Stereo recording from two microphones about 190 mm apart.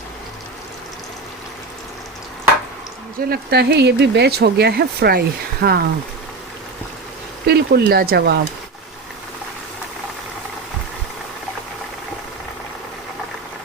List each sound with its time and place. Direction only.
3.2 s speech: 55° right (ahead or behind)
7.4 s speech: 55° right (ahead or behind)